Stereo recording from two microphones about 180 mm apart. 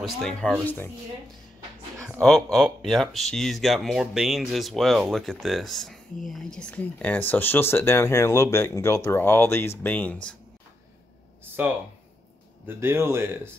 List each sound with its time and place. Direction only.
0.0 s speech: centre (ahead or behind)
2.1 s speech: centre (ahead or behind)
12.6 s speech: 15° right (ahead or behind)